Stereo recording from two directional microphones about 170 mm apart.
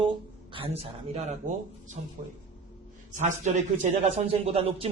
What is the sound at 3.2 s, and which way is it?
A woman's voice, 45° right (ahead or behind).